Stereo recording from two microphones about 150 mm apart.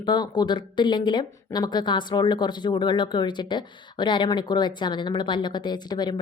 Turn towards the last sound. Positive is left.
turn(degrees=30)  # may be behind; listen again after turning